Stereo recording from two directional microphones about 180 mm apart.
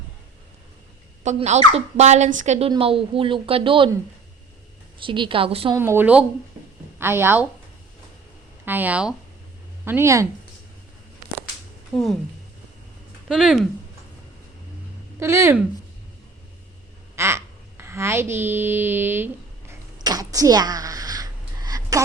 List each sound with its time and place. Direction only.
1.2 s a woman's voice: 40° right (ahead or behind)
4.9 s a woman's voice: 25° right (ahead or behind)
5.7 s speech: 15° right (ahead or behind)
8.6 s speech: 10° right (ahead or behind)
11.9 s speech: 5° left (ahead or behind)
13.2 s speech: 5° right (ahead or behind)
15.2 s speech: 15° right (ahead or behind)
17.2 s speech: 15° right (ahead or behind)
20.0 s a sound: 20° right (ahead or behind)